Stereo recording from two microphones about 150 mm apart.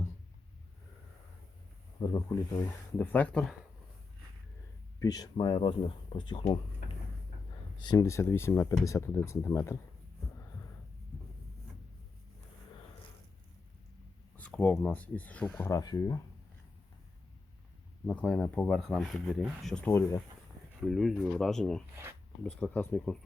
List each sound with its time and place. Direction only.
2.0 s speech: 25° left (ahead or behind)
3.0 s speech: 10° left (ahead or behind)
4.9 s speech: 25° left (ahead or behind)
7.8 s speech: 25° left (ahead or behind)
14.3 s speech: 10° left (ahead or behind)
15.7 s speech: 25° left (ahead or behind)
18.0 s speech: 10° left (ahead or behind)
19.9 s speech: 15° left (ahead or behind)
20.8 s speech: centre (ahead or behind)